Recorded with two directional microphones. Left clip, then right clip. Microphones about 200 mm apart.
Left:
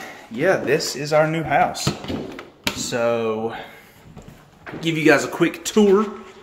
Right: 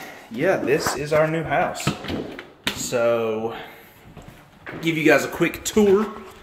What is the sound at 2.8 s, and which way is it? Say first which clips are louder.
Speech: right 1 dB; 5° left (ahead or behind).